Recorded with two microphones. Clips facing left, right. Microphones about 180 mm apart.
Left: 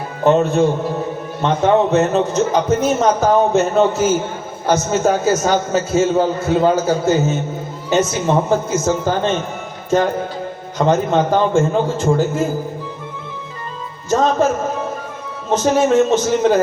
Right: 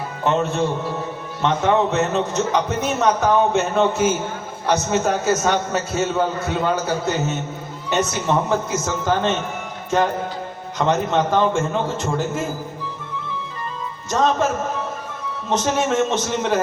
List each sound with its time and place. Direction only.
0.3 s a man's voice: 35° left (ahead or behind)
10.8 s a man's voice: 35° left (ahead or behind)
14.1 s a man's voice: 35° left (ahead or behind)
15.4 s a man's voice: 40° left (ahead or behind)